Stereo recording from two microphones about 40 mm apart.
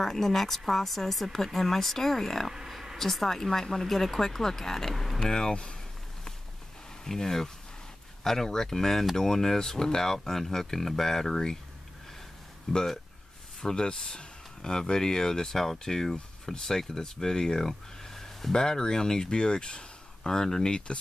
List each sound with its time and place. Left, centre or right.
0.0 s speech: centre
5.2 s speech: centre
7.1 s speech: centre
12.7 s speech: centre